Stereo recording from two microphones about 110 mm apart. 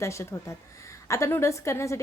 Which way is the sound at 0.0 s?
25° left (ahead or behind).